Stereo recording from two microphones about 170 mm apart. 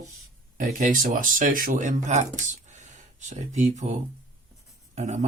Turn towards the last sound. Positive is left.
turn(degrees=-45)  # may be behind; listen again after turning